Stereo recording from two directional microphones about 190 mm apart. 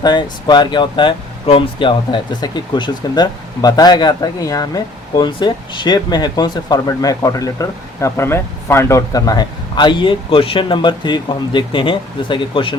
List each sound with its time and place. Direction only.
0.0 s speech: 20° left (ahead or behind)